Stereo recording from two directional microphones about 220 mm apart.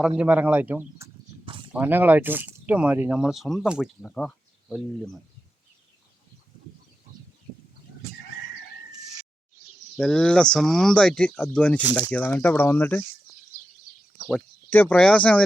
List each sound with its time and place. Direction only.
0.2 s speech: 5° right (ahead or behind)
1.5 s a sound: 25° right (ahead or behind)
1.7 s speech: 10° right (ahead or behind)
10.0 s speech: 5° left (ahead or behind)
11.8 s speech: 5° right (ahead or behind)
12.1 s speech: 5° left (ahead or behind)
14.3 s speech: 5° left (ahead or behind)